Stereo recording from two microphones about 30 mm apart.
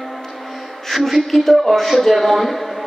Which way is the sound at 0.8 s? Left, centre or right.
Centre.